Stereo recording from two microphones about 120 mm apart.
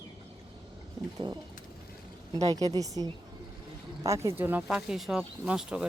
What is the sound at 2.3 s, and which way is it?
A woman's voice, 30° right (ahead or behind).